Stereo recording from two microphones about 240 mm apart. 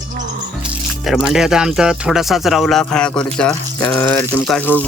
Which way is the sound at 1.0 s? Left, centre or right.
Centre.